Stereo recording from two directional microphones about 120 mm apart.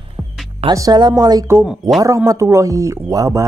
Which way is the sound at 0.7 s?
35° right (ahead or behind).